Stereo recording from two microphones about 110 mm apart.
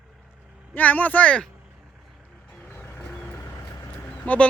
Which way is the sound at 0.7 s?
15° left (ahead or behind).